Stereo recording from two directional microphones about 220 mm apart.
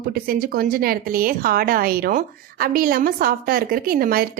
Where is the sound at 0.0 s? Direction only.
45° right (ahead or behind).